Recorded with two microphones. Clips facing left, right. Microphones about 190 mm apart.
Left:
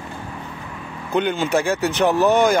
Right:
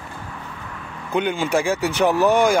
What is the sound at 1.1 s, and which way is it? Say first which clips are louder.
Speech: left 1 dB; 10° right (ahead or behind).